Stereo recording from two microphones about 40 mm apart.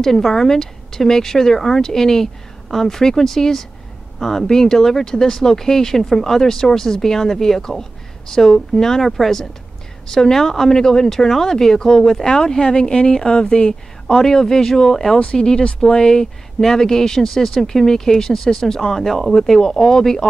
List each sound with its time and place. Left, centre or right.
0.0 s speech: centre